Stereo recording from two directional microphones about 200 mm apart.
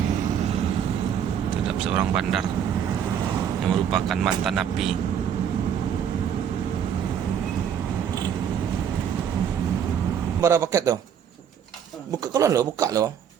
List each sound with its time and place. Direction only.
1.8 s speech: 5° right (ahead or behind)
3.7 s speech: centre (ahead or behind)
10.4 s speech: 15° right (ahead or behind)
12.3 s speech: 15° right (ahead or behind)